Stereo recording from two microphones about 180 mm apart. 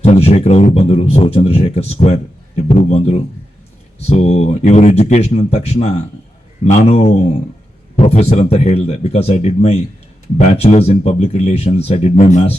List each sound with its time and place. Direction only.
0.0 s speech: 35° left (ahead or behind)